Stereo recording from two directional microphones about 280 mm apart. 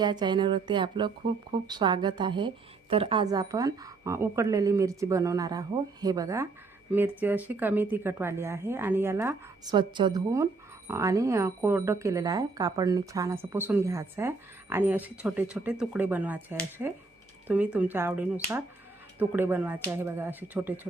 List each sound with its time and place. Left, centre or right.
0.0 s speech: centre